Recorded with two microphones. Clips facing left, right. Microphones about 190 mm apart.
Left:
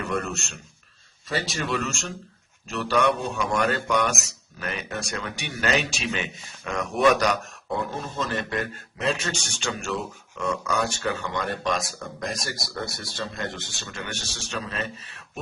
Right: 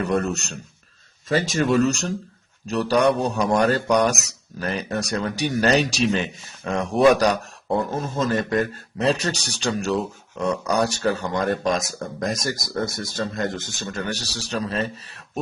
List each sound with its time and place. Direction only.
0.0 s a man's voice: 35° right (ahead or behind)